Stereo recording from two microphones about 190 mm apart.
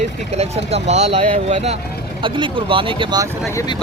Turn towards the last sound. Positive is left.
turn(degrees=-20)  # may be behind; listen again after turning